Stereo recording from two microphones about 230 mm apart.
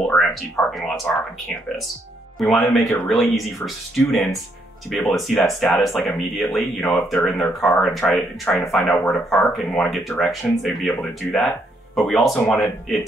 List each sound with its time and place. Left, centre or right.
0.1 s speech: centre
2.3 s speech: centre